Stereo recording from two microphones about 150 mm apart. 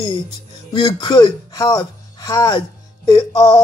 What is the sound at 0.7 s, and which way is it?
Speech, 30° left (ahead or behind).